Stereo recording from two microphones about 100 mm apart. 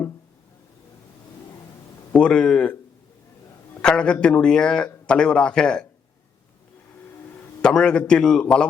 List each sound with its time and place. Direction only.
2.1 s a man's voice: 10° left (ahead or behind)
3.8 s a man's voice: 10° left (ahead or behind)
7.6 s a man's voice: 10° left (ahead or behind)